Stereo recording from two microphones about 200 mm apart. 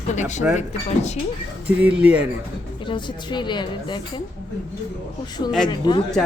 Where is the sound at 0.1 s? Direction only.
35° left (ahead or behind).